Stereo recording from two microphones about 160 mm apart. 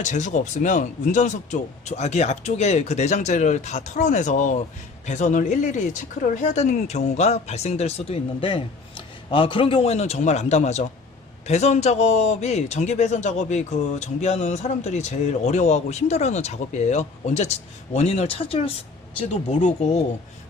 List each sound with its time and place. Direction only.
0.0 s a man's voice: 50° left (ahead or behind)